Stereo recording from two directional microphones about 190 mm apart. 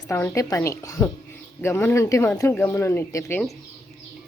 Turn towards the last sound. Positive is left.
turn(degrees=15)  # may be behind; listen again after turning